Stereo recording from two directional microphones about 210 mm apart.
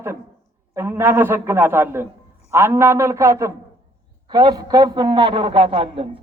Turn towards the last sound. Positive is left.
turn(degrees=-25)  # may be behind; listen again after turning